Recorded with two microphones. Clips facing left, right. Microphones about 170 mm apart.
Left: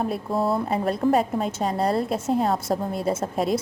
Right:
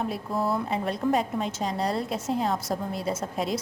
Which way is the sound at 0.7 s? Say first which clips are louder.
Left 4 dB; 50° left (ahead or behind).